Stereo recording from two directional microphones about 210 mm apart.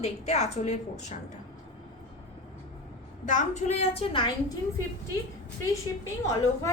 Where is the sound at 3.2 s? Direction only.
35° left (ahead or behind).